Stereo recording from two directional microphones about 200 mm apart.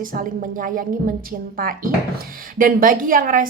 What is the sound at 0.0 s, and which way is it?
Speech, 45° right (ahead or behind).